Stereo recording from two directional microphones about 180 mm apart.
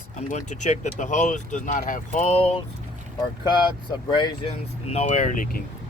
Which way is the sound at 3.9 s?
25° left (ahead or behind).